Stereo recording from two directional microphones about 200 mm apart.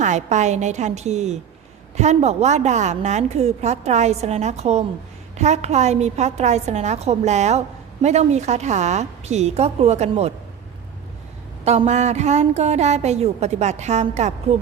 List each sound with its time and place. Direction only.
0.0 s a woman's voice: 35° right (ahead or behind)
11.6 s a woman's voice: 35° right (ahead or behind)